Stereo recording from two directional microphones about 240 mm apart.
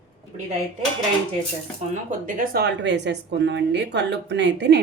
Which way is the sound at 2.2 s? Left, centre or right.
Right.